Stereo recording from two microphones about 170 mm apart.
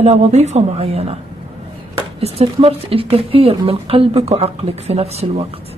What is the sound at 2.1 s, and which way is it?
Speech, 35° right (ahead or behind).